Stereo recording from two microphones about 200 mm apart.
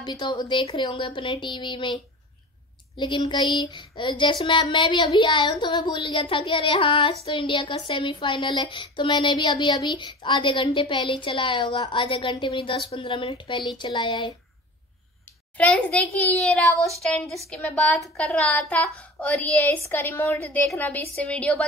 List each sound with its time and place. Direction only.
0.0 s speech: 20° left (ahead or behind)
3.0 s speech: 25° left (ahead or behind)
15.5 s a child's voice: 5° left (ahead or behind)